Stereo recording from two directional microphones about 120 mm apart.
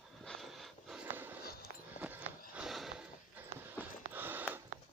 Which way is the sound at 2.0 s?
15° right (ahead or behind).